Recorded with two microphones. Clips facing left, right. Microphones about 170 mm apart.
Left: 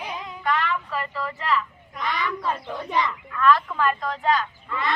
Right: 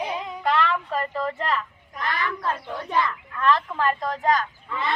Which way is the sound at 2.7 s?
15° left (ahead or behind).